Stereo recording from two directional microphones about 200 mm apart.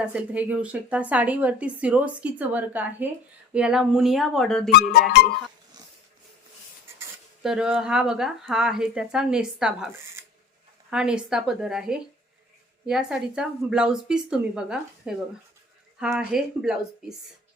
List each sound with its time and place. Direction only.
0.0 s a woman's voice: 5° right (ahead or behind)
4.7 s speech: 50° left (ahead or behind)
7.4 s speech: 5° right (ahead or behind)
10.9 s speech: 5° right (ahead or behind)